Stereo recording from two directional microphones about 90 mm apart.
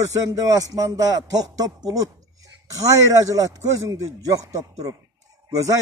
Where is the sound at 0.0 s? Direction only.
40° right (ahead or behind).